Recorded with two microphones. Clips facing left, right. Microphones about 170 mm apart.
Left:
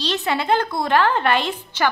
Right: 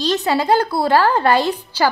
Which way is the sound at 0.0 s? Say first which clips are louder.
Right 5 dB; 40° right (ahead or behind).